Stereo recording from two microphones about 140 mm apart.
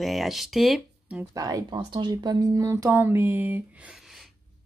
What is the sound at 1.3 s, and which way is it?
Speech, 25° right (ahead or behind).